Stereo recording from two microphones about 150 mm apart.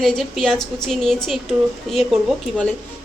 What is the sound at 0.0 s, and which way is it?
Speech, centre (ahead or behind).